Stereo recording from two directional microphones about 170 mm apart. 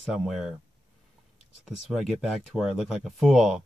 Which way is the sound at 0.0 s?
Centre (ahead or behind).